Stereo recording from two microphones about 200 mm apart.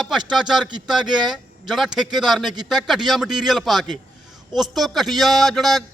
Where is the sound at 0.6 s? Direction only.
20° right (ahead or behind).